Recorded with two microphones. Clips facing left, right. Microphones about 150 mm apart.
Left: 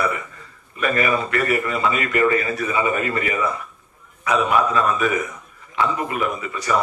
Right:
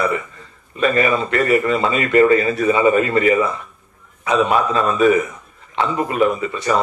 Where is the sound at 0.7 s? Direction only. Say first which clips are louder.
Right 4 dB; 30° right (ahead or behind).